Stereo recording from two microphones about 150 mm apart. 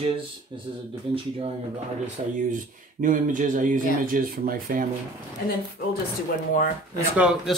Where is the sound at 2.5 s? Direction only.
60° right (ahead or behind).